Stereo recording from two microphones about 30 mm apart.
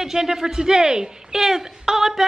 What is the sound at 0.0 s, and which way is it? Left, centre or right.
Speech, centre.